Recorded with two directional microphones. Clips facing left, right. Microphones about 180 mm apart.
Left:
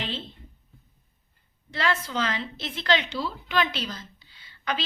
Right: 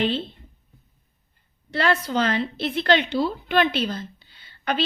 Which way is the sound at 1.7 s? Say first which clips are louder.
Right 5 dB; 60° right (ahead or behind).